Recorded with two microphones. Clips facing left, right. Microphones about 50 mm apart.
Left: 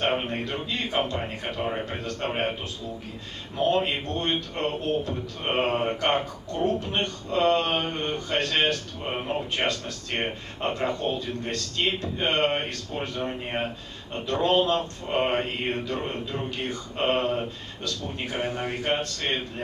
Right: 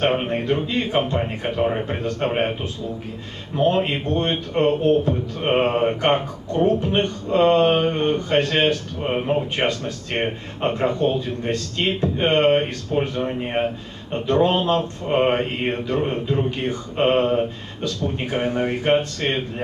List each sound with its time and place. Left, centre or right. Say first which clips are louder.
0.0 s a man's voice: right 6 dB; right
3.5 s a man's voice: right 4 dB; right